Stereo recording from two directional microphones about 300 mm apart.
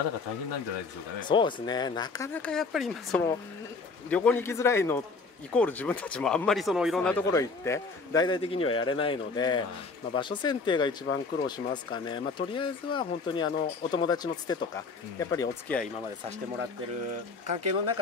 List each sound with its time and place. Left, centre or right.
1.2 s speech: centre
17.5 s speech: right